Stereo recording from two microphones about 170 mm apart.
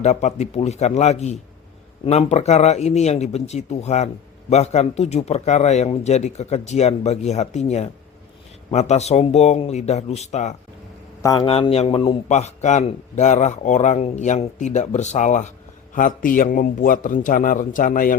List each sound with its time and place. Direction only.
0.0 s speech: 40° left (ahead or behind)
11.2 s a man's voice: 20° left (ahead or behind)
11.4 s a man's voice: 35° left (ahead or behind); by 18.2 s 55° left (ahead or behind)